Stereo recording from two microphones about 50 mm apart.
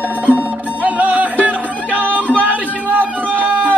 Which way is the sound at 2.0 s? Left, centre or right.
Left.